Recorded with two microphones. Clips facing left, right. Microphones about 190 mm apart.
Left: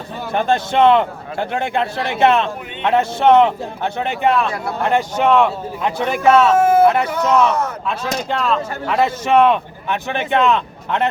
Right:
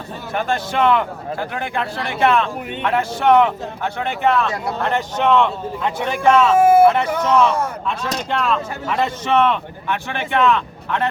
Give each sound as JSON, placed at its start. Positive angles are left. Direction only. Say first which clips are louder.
{"t": 0.3, "sound": "a man's voice", "louder": "left 4 dB", "side_deg": 25}
{"t": 6.6, "sound": "a sound", "louder": "right 1 dB", "side_deg": -10}
{"t": 6.8, "sound": "speech", "louder": "even", "side_deg": 10}
{"t": 7.4, "sound": "speech", "louder": "left 1 dB", "side_deg": -10}
{"t": 8.5, "sound": "speech", "louder": "left 3 dB", "side_deg": 5}